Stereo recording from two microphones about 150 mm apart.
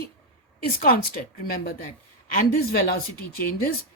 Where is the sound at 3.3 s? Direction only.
90° left.